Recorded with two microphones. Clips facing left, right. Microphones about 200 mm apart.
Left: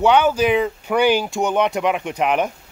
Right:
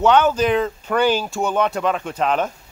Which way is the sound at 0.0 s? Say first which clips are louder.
Even; 10° left (ahead or behind).